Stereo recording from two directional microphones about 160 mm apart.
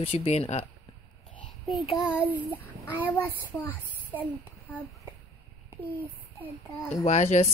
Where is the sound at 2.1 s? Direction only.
10° right (ahead or behind).